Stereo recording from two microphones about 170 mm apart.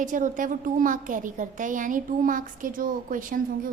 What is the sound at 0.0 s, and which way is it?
A woman's voice, 50° right (ahead or behind).